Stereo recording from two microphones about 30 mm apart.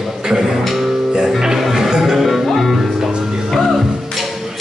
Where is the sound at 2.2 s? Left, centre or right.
Centre.